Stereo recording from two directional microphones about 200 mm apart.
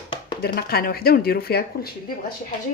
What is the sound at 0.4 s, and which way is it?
Speech, 50° left (ahead or behind).